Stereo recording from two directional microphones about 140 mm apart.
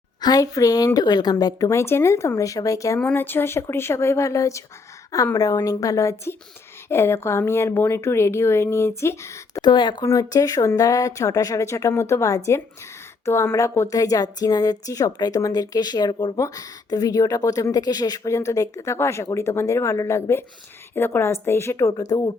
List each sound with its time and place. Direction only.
0.2 s speech: 25° left (ahead or behind)
3.0 s speech: 10° left (ahead or behind)
9.6 s speech: 30° left (ahead or behind)